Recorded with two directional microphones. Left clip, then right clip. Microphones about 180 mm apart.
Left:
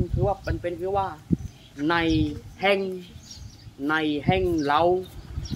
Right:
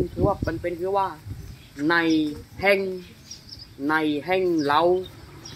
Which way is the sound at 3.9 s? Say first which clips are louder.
Right 1 dB; 5° left (ahead or behind).